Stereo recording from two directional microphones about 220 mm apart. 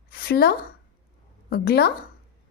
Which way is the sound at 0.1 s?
45° left (ahead or behind).